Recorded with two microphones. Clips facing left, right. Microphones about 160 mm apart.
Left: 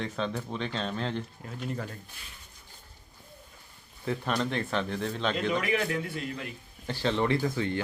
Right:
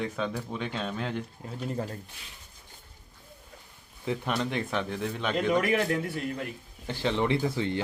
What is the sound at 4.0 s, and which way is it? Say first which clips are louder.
Speech: even; 15° right (ahead or behind).